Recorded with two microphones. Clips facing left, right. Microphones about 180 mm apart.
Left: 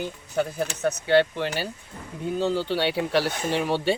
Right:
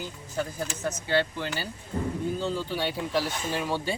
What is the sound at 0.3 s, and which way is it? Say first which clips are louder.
Speech: left 6 dB; 65° left (ahead or behind).